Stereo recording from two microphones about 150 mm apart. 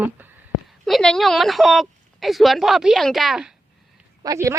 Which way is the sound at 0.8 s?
5° left (ahead or behind).